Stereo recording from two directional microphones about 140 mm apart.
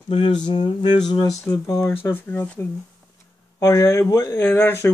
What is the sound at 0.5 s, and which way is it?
Speech, 35° left (ahead or behind).